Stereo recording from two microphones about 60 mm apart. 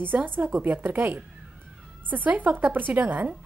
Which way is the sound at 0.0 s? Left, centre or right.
Right.